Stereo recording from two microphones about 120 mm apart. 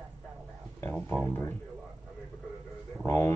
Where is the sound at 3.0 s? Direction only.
20° left (ahead or behind).